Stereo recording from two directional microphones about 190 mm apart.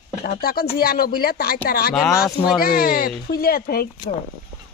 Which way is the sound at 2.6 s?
50° left (ahead or behind).